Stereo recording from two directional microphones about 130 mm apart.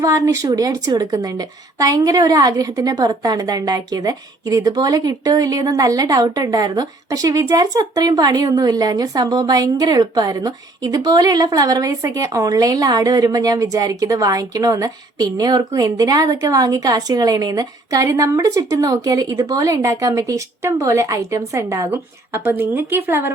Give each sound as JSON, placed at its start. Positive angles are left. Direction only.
{"t": 0.0, "sound": "a woman's voice", "side_deg": -25}